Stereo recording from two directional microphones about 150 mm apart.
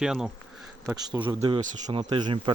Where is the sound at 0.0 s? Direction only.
5° right (ahead or behind).